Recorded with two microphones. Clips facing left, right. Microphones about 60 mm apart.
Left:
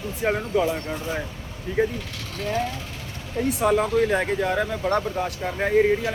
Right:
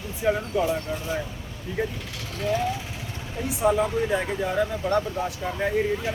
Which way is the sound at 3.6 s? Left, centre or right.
Left.